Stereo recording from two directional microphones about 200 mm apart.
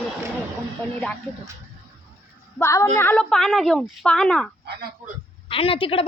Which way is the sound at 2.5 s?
15° left (ahead or behind).